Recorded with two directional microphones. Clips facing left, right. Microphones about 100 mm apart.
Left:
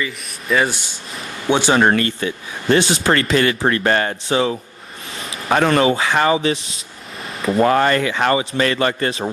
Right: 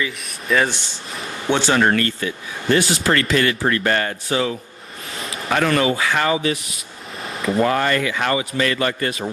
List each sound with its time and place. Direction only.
0.0 s speech: centre (ahead or behind)
1.5 s speech: 15° left (ahead or behind)
1.8 s speech: 25° left (ahead or behind)
7.2 s a sound: centre (ahead or behind)
7.6 s speech: 45° left (ahead or behind)